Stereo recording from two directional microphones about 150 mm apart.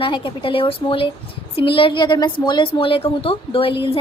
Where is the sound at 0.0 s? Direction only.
35° left (ahead or behind).